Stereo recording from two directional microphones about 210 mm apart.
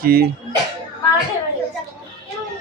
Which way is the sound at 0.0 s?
45° right (ahead or behind).